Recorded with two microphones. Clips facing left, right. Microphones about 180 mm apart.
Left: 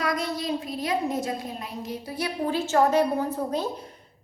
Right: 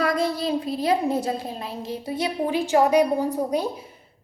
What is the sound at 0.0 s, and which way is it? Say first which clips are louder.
A woman's voice: right 5 dB; 30° right (ahead or behind).